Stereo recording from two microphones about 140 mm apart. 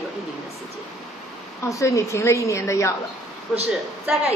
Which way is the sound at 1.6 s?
20° left (ahead or behind).